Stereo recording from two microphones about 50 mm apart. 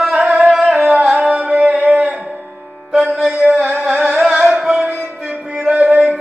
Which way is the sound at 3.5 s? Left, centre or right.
Centre.